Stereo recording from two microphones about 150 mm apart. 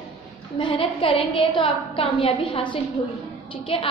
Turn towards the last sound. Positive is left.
turn(degrees=35)  # may be behind; listen again after turning